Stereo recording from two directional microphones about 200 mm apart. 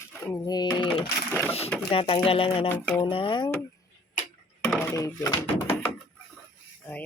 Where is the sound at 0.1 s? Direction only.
15° left (ahead or behind).